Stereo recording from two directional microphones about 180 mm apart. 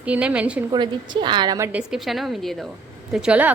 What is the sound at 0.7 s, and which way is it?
A woman's voice, 25° right (ahead or behind).